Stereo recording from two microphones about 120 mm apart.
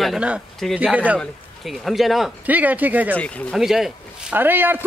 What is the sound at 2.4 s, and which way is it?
Speech, 15° right (ahead or behind).